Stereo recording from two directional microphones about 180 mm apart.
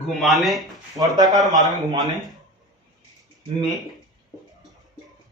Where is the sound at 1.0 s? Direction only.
20° right (ahead or behind).